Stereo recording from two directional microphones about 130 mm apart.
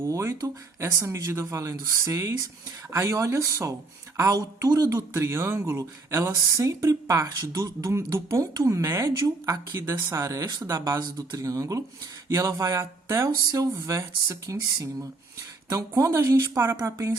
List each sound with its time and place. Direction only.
0.0 s speech: 20° right (ahead or behind)